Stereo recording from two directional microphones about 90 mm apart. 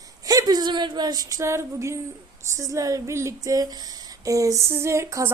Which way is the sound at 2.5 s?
35° right (ahead or behind).